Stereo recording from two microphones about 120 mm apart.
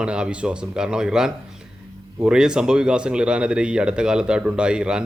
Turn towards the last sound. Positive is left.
turn(degrees=-5)  # may be behind; listen again after turning